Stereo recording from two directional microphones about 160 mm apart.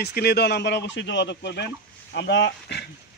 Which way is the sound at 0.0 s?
85° left.